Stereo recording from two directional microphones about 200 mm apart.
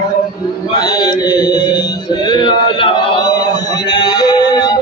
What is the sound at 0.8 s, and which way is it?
Chant, 20° left (ahead or behind).